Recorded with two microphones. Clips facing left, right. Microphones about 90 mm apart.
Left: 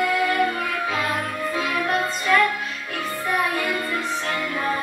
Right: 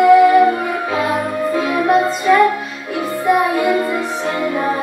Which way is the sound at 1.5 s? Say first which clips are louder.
Right 9 dB; 20° right (ahead or behind).